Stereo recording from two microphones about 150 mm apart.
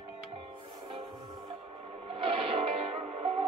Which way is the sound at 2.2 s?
35° right (ahead or behind).